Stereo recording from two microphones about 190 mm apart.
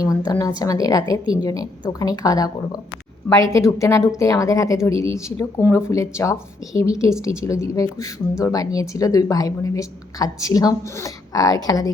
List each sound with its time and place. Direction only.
0.3 s a woman's voice: 20° left (ahead or behind)